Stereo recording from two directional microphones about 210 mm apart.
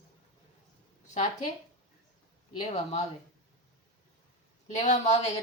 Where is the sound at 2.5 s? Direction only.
30° left (ahead or behind).